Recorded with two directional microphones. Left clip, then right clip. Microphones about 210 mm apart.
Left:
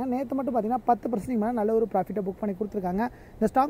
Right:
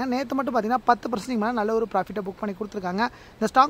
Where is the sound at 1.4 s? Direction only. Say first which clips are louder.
Right 1 dB; 5° right (ahead or behind).